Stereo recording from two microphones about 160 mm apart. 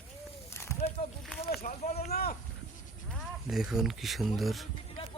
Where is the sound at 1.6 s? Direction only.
50° left (ahead or behind).